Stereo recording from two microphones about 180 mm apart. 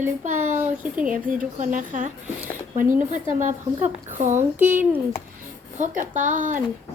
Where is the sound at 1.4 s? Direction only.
45° right (ahead or behind).